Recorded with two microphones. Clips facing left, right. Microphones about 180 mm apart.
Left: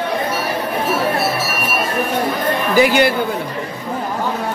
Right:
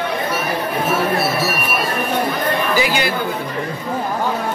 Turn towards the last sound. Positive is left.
turn(degrees=55)  # may be behind; listen again after turning